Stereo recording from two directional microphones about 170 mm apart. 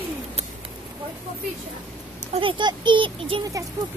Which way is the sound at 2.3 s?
30° right (ahead or behind).